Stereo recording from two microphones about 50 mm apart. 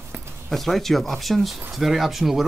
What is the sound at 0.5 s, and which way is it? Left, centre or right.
Speech, centre.